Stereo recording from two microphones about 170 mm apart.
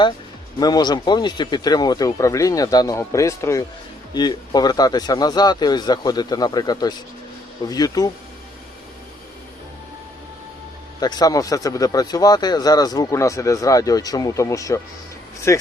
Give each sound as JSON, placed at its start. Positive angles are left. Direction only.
{"t": 0.6, "sound": "speech", "side_deg": 25}
{"t": 11.0, "sound": "speech", "side_deg": 25}